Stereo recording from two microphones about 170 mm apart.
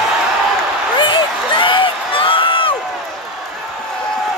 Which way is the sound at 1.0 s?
30° left (ahead or behind).